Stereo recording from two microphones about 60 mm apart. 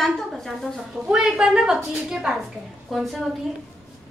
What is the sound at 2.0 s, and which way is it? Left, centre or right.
A woman's voice, centre.